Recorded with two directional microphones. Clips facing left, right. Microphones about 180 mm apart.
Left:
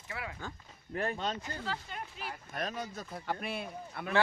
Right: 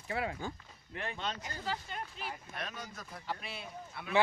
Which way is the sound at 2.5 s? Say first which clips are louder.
Left 6 dB; 35° left (ahead or behind).